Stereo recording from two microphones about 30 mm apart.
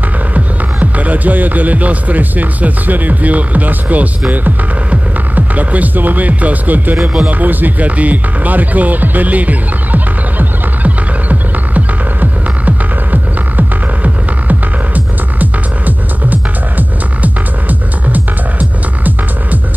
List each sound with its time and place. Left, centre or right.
0.3 s speech: right
5.3 s speech: right
7.2 s speech: right
7.9 s music: right